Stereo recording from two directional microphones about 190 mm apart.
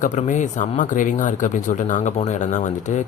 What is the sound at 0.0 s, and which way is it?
Speech, 40° left (ahead or behind).